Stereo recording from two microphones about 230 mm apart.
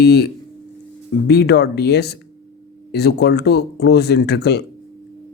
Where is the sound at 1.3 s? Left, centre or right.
Left.